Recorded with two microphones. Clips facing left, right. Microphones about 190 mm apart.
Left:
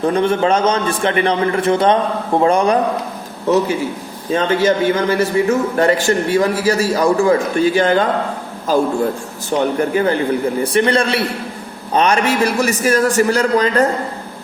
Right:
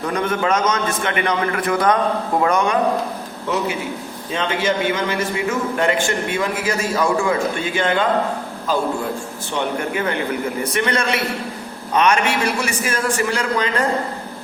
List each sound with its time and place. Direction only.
0.0 s a man's voice: 30° left (ahead or behind)
4.3 s a man's voice: 40° left (ahead or behind)
9.5 s a man's voice: 35° left (ahead or behind)